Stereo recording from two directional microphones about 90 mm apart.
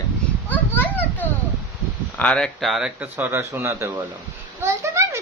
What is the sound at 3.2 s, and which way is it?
Speech, 30° right (ahead or behind).